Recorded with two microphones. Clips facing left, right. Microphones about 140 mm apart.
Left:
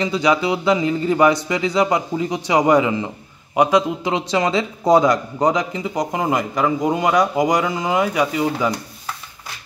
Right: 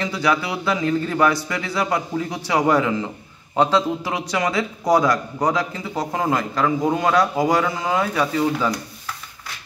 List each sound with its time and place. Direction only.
0.0 s a man's voice: 20° left (ahead or behind)